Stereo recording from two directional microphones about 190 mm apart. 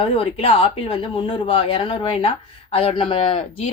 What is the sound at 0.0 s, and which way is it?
Speech, 30° left (ahead or behind).